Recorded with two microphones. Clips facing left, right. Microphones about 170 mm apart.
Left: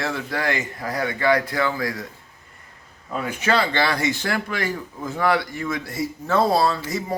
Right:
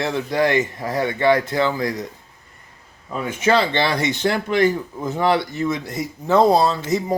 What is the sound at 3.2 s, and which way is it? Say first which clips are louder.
Speech: right 4 dB; 20° right (ahead or behind).